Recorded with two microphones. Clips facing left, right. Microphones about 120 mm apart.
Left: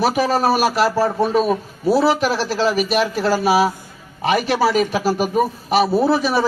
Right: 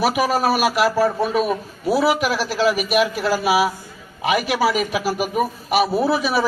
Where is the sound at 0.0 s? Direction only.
10° right (ahead or behind).